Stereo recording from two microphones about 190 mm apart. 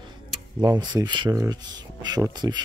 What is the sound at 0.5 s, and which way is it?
Speech, 25° right (ahead or behind).